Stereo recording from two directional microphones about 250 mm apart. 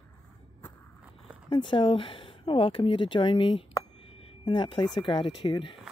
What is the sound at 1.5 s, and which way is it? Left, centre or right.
Speech, centre.